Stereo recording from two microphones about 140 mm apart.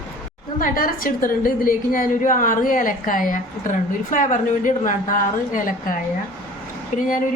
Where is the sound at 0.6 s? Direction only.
90° left.